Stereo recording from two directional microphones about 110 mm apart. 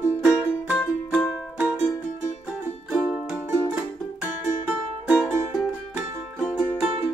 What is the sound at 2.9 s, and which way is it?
Music, 5° right (ahead or behind).